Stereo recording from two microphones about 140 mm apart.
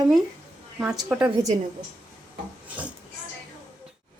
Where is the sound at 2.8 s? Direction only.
10° right (ahead or behind).